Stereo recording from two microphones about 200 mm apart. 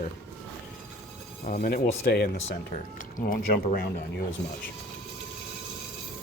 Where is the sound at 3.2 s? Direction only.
40° left (ahead or behind).